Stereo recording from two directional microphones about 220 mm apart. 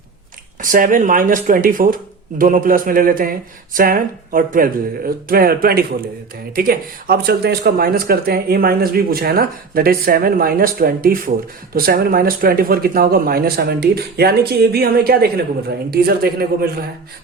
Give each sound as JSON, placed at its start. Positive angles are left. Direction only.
{"t": 0.6, "sound": "speech", "side_deg": -35}